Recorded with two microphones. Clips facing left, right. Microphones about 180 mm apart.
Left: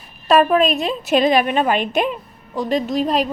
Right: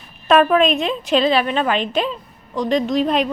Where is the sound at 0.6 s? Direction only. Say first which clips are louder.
Right 1 dB; 40° left (ahead or behind).